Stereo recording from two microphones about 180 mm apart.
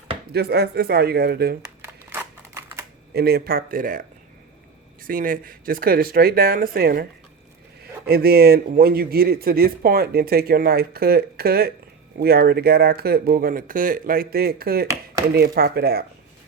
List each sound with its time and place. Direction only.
0.3 s a man's voice: 65° right (ahead or behind)
1.8 s a sound: 10° right (ahead or behind)
3.1 s a man's voice: 60° right (ahead or behind)
5.0 s speech: 50° right (ahead or behind)
8.0 s a man's voice: 60° right (ahead or behind)